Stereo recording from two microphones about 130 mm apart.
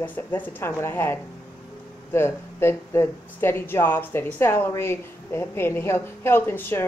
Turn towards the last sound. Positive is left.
turn(degrees=15)  # may be behind; listen again after turning